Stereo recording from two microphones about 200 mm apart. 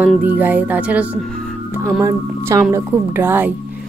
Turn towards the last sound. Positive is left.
turn(degrees=-10)  # may be behind; listen again after turning